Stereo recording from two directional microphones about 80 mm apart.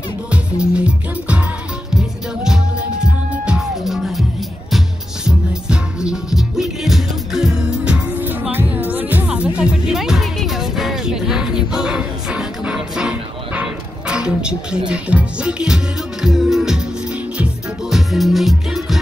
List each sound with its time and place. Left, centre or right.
0.7 s music: centre
8.3 s music: right
9.9 s music: centre